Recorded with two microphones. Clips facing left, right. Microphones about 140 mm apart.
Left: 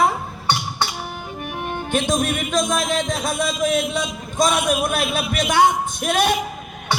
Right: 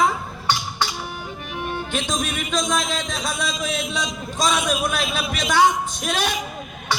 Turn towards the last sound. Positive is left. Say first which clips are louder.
# left 5 dB
turn(degrees=55)  # may be behind; listen again after turning